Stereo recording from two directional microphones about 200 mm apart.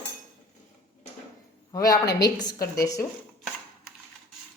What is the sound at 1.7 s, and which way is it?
A woman's voice, 15° left (ahead or behind).